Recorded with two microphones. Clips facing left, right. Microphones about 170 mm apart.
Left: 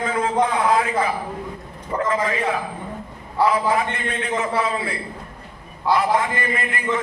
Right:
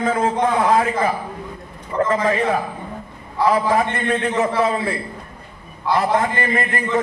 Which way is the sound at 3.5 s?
45° right (ahead or behind).